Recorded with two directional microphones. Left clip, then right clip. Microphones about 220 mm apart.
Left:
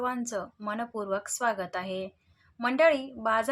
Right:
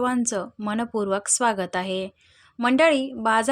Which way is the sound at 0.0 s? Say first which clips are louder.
Right 7 dB; 40° right (ahead or behind).